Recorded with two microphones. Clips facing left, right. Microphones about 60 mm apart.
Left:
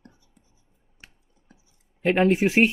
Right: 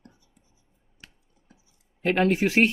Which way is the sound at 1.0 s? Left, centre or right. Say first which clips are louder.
Left 1 dB; left.